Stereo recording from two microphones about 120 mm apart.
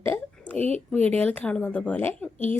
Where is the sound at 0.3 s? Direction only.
10° left (ahead or behind).